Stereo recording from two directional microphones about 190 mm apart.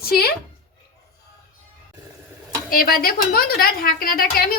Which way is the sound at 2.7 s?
50° left (ahead or behind).